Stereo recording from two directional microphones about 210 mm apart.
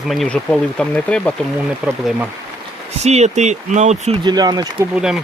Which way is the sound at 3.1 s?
30° right (ahead or behind).